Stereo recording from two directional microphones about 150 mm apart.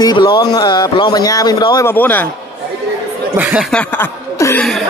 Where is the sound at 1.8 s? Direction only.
10° left (ahead or behind).